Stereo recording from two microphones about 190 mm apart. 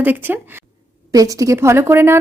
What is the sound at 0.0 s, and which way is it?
Speech, 10° right (ahead or behind).